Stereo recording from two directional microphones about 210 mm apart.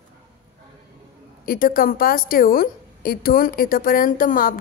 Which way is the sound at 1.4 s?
45° left (ahead or behind).